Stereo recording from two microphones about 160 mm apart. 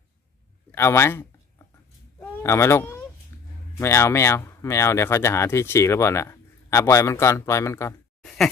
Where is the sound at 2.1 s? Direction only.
15° left (ahead or behind).